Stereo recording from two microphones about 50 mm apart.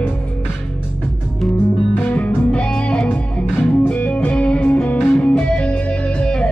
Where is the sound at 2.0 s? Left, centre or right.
Left.